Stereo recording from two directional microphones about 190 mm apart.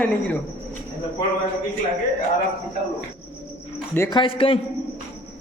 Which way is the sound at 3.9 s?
20° left (ahead or behind).